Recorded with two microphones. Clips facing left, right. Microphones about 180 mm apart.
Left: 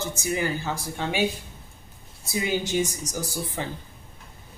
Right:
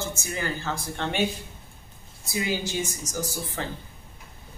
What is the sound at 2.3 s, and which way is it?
A woman's voice, 20° left (ahead or behind).